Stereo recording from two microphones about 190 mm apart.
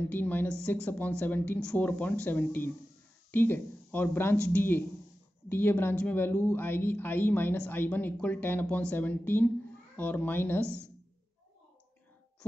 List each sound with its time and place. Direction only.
0.0 s a woman's voice: 10° left (ahead or behind)